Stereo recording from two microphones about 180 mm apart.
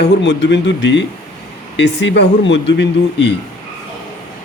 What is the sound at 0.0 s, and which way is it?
Speech, 70° left (ahead or behind).